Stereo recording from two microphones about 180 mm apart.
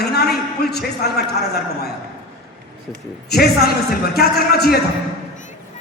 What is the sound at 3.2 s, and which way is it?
A man's voice, 60° left (ahead or behind).